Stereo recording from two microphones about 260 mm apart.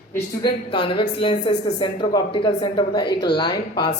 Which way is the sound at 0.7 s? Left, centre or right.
Centre.